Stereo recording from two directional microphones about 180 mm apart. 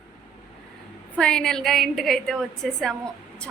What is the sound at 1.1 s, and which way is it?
A woman's voice, 5° left (ahead or behind).